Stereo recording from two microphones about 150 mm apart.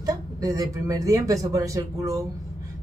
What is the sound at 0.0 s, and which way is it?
A woman's voice, 25° right (ahead or behind).